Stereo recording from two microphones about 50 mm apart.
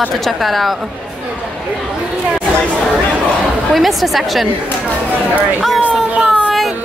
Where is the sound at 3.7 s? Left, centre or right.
Centre.